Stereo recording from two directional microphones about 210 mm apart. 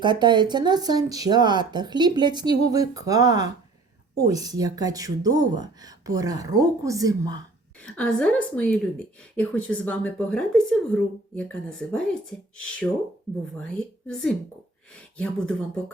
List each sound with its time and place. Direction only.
0.0 s speech: 20° right (ahead or behind)
7.9 s a woman's voice: 5° left (ahead or behind)
14.1 s a woman's voice: centre (ahead or behind)